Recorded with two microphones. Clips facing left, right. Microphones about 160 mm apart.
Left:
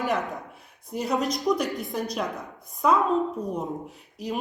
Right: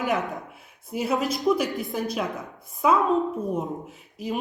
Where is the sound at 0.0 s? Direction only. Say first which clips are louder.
Right 1 dB; centre (ahead or behind).